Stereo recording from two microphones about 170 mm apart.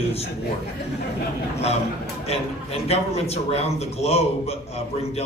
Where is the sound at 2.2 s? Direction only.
35° left (ahead or behind).